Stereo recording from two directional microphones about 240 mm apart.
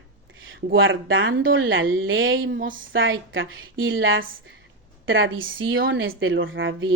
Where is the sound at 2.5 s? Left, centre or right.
Right.